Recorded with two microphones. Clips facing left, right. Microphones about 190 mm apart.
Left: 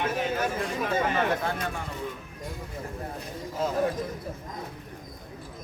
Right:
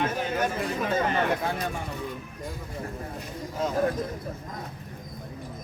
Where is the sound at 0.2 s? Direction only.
Centre (ahead or behind).